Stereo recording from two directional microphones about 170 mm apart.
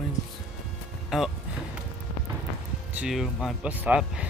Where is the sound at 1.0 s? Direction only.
Centre (ahead or behind).